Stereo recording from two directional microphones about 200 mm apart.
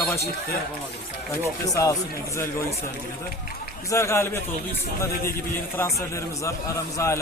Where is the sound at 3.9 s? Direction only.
15° left (ahead or behind).